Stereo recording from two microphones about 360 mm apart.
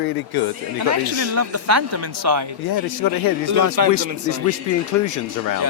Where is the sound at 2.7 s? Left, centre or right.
Left.